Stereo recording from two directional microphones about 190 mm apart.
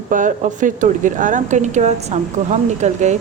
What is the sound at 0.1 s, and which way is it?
A woman's voice, 45° right (ahead or behind).